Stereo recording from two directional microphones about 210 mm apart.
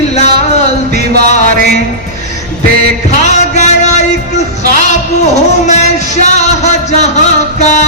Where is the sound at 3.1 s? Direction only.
35° left (ahead or behind).